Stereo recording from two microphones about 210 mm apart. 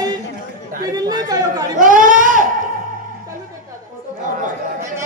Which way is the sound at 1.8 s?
40° right (ahead or behind).